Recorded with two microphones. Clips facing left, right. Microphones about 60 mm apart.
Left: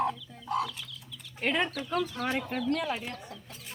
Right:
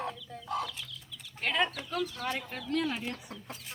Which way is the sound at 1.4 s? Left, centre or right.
Centre.